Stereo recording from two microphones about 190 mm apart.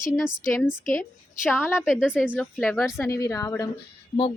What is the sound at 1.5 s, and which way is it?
Speech, 10° left (ahead or behind).